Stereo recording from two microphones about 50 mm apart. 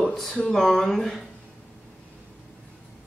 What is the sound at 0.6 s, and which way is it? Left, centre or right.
Speech, centre.